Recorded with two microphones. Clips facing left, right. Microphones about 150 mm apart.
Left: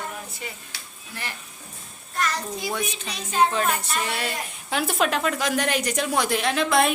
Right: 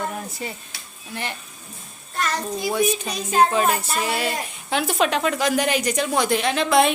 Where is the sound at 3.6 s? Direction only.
35° right (ahead or behind).